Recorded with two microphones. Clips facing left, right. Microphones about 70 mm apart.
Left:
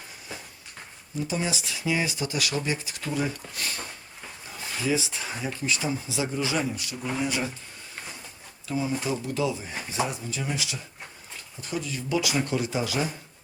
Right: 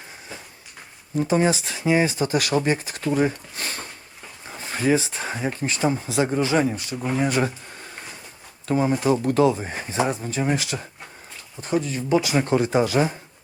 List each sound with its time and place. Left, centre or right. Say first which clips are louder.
1.2 s speech: right 9 dB; right
8.6 s speech: right 8 dB; right